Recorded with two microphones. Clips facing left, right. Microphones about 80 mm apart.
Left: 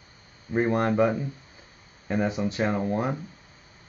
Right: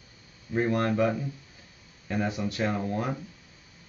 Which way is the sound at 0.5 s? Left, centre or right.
Left.